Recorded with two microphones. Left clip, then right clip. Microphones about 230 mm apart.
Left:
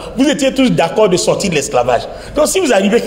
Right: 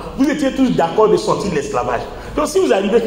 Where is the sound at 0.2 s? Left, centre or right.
Left.